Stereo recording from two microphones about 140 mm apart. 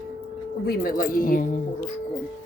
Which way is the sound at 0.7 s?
90° left.